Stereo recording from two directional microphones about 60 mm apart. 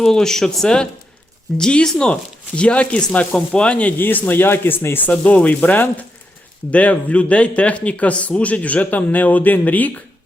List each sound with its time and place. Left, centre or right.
0.0 s a man's voice: centre
3.9 s speech: left
5.1 s a man's voice: left